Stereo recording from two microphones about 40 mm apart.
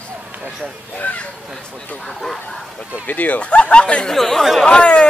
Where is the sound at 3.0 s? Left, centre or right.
Left.